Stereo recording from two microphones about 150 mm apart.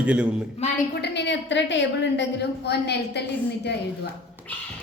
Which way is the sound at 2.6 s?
90° left.